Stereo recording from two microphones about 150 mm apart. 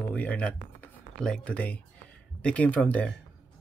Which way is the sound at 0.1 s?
10° left (ahead or behind).